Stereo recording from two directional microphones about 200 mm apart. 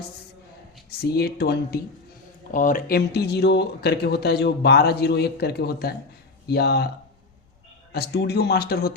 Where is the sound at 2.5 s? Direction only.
40° left (ahead or behind).